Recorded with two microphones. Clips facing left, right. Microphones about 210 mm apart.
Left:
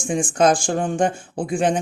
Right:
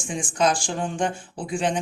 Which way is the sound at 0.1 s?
50° left (ahead or behind).